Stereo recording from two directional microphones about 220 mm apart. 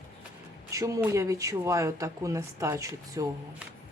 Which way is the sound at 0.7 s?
15° right (ahead or behind).